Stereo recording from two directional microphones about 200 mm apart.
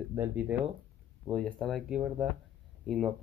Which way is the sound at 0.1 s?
10° right (ahead or behind).